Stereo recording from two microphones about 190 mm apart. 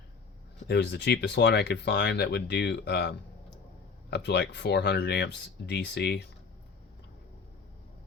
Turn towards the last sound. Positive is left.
turn(degrees=60)  # may be behind; listen again after turning